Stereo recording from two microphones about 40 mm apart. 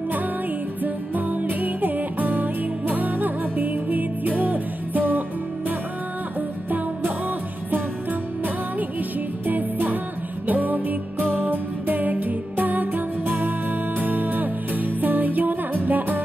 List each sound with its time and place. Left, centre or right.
0.8 s music: right
9.5 s music: right